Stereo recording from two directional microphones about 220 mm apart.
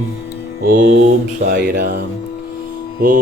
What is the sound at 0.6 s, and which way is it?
Mantra, 40° right (ahead or behind).